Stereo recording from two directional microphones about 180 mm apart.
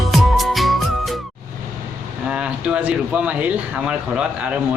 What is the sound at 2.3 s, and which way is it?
Speech, 5° right (ahead or behind).